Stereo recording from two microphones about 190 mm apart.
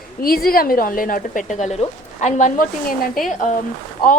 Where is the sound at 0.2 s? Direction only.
50° left (ahead or behind).